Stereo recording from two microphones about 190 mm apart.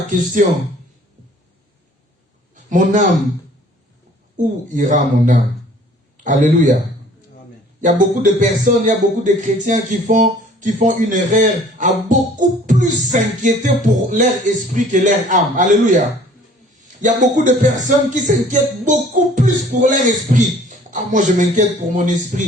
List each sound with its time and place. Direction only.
0.4 s speech: 45° right (ahead or behind)
2.6 s a man's voice: 40° right (ahead or behind)
4.4 s speech: 40° right (ahead or behind)
6.1 s a man's voice: 40° right (ahead or behind)
7.8 s speech: 40° right (ahead or behind)